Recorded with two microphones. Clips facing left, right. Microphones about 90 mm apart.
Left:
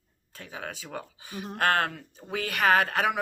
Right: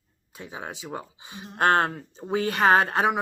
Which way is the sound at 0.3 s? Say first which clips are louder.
Right 2 dB; 20° right (ahead or behind).